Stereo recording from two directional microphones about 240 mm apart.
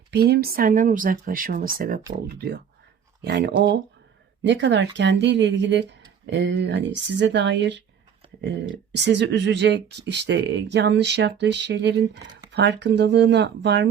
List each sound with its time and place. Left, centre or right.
0.1 s speech: right
3.2 s speech: right